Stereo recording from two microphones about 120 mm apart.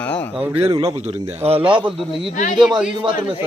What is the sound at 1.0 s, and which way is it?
A man's voice, 60° right (ahead or behind).